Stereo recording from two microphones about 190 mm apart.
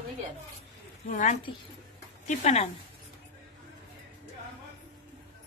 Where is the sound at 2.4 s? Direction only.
35° left (ahead or behind).